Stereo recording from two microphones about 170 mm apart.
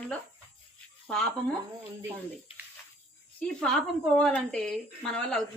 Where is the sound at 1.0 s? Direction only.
5° left (ahead or behind).